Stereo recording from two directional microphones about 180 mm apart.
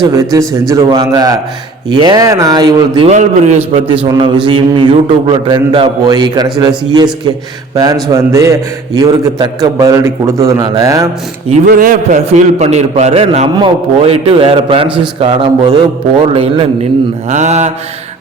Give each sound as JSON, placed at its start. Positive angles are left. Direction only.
{"t": 0.0, "sound": "a man's voice", "side_deg": -15}
{"t": 3.1, "sound": "a man's voice", "side_deg": -40}
{"t": 4.0, "sound": "a man's voice", "side_deg": -30}
{"t": 11.6, "sound": "a man's voice", "side_deg": -50}
{"t": 12.2, "sound": "a man's voice", "side_deg": -35}